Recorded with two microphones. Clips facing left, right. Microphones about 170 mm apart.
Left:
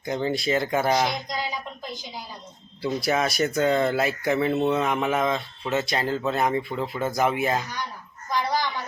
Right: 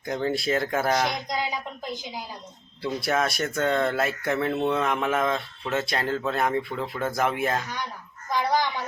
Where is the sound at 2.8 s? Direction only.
Centre (ahead or behind).